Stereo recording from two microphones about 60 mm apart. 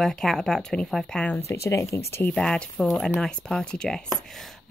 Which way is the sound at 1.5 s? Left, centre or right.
Left.